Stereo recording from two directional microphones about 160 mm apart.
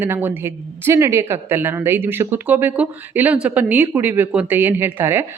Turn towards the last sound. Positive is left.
turn(degrees=-15)  # may be behind; listen again after turning